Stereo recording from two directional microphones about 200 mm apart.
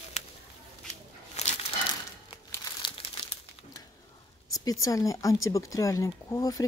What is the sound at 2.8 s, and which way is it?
Crumpling, 25° left (ahead or behind).